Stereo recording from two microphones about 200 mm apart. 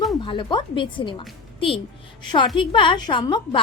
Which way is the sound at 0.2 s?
25° left (ahead or behind).